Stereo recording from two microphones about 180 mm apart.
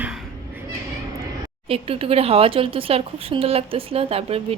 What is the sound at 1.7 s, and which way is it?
Speech, 30° right (ahead or behind).